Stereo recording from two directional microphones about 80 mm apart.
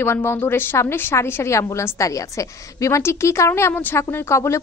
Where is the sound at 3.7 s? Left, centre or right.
Left.